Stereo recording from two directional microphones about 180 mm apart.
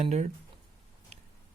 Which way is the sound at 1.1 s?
40° right (ahead or behind).